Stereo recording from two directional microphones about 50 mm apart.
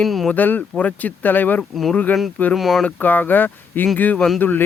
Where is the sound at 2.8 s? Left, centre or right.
Left.